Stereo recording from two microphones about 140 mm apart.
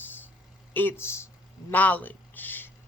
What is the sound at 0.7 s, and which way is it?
Speech, 15° left (ahead or behind).